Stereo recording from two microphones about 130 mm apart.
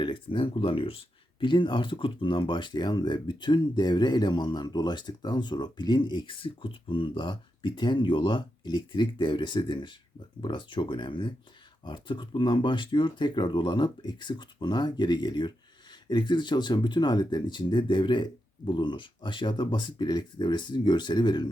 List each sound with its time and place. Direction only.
0.0 s speech: 40° left (ahead or behind)